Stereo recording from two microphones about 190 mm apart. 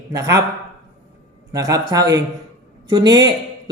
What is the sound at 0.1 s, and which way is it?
Speech, 15° right (ahead or behind).